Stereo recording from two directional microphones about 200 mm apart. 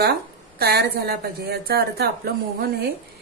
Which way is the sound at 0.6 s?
50° right (ahead or behind).